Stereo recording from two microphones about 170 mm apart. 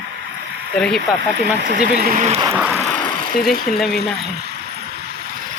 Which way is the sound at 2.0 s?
55° right (ahead or behind).